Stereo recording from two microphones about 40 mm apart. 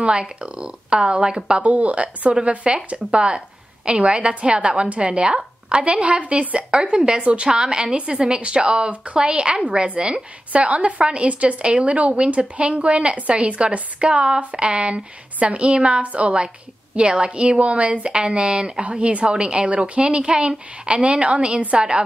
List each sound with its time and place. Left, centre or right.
0.0 s speech: right